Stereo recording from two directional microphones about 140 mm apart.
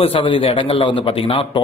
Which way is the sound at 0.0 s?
40° left (ahead or behind).